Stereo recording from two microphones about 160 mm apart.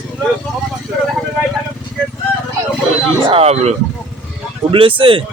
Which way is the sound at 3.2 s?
40° right (ahead or behind).